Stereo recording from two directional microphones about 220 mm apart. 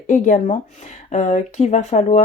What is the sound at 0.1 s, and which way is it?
Speech, 35° left (ahead or behind).